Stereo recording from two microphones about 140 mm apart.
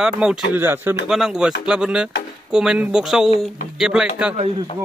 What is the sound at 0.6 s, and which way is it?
Speech, 15° right (ahead or behind).